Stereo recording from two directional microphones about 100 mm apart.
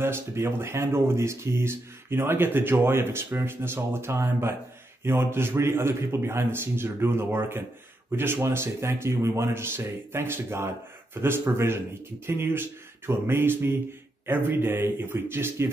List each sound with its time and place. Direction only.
0.0 s speech: 25° right (ahead or behind)